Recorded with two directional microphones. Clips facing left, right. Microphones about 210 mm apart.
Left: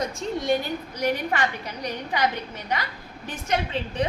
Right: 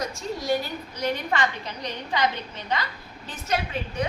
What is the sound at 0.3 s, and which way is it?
A woman's voice, 20° left (ahead or behind).